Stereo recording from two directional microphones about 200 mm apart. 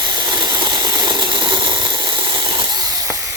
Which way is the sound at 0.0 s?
20° right (ahead or behind).